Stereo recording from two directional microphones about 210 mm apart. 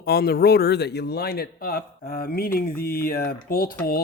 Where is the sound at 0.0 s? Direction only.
45° left (ahead or behind).